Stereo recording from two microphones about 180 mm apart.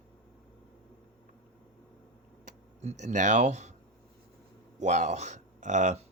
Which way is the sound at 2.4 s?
40° right (ahead or behind).